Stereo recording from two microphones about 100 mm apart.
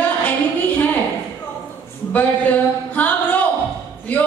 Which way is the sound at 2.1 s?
15° left (ahead or behind).